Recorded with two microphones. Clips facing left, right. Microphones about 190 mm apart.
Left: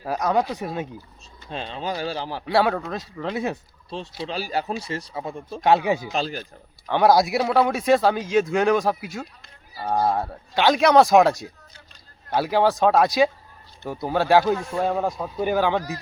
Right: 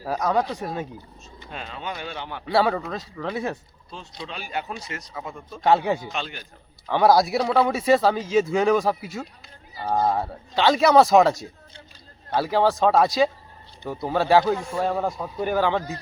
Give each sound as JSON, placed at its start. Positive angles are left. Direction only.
{"t": 0.0, "sound": "speech", "side_deg": 0}
{"t": 1.5, "sound": "speech", "side_deg": 30}
{"t": 2.5, "sound": "speech", "side_deg": 0}
{"t": 3.8, "sound": "speech", "side_deg": 30}
{"t": 5.6, "sound": "speech", "side_deg": 5}
{"t": 6.1, "sound": "speech", "side_deg": 35}
{"t": 6.8, "sound": "speech", "side_deg": 0}